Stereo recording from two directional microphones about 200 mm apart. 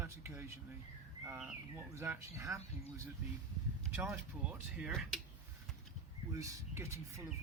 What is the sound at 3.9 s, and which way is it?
Speech, 10° right (ahead or behind).